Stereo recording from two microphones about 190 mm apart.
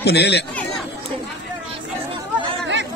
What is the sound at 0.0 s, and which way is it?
Speech, 60° left (ahead or behind).